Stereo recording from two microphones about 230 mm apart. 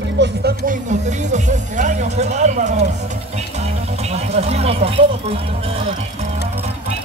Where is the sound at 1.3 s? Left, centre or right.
Right.